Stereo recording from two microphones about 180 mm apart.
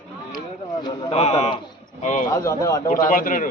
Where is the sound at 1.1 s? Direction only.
35° left (ahead or behind).